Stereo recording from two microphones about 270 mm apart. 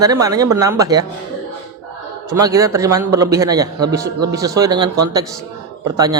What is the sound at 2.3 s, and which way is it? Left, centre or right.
A man's voice, centre.